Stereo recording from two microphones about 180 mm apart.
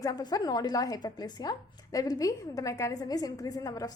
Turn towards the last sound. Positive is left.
turn(degrees=20)  # may be behind; listen again after turning